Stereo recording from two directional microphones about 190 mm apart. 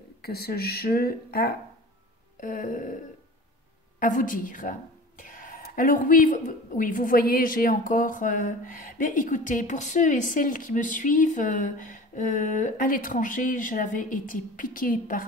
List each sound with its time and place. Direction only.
0.2 s a woman's voice: 55° left (ahead or behind)
4.0 s a woman's voice: 45° left (ahead or behind)